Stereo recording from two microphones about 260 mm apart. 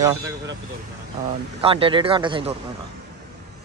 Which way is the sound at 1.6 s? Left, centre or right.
Right.